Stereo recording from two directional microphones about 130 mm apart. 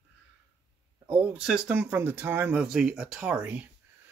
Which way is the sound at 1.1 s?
10° right (ahead or behind).